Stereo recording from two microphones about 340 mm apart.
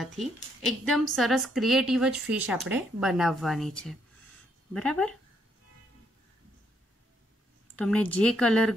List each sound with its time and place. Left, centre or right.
0.0 s a woman's voice: centre
7.7 s speech: centre